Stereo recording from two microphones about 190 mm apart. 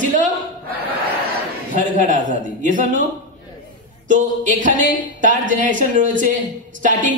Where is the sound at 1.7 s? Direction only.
40° right (ahead or behind).